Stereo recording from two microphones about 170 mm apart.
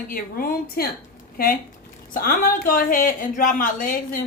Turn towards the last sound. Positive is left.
turn(degrees=55)  # may be behind; listen again after turning